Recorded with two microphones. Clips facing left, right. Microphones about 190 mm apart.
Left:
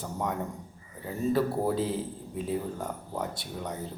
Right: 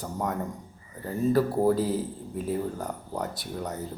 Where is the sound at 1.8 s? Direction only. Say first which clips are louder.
Right 3 dB; 40° right (ahead or behind).